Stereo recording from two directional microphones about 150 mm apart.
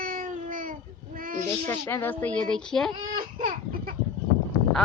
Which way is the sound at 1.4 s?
20° left (ahead or behind).